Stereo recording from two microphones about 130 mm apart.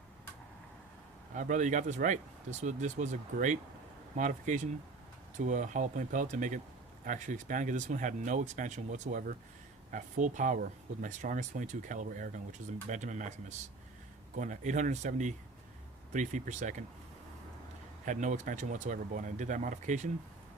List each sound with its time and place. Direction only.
1.3 s speech: 85° right
14.3 s speech: 75° right (ahead or behind)
18.0 s speech: 70° right (ahead or behind)